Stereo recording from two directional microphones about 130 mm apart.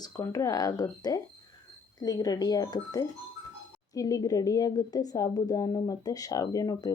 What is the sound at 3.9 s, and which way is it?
Speech, 25° left (ahead or behind).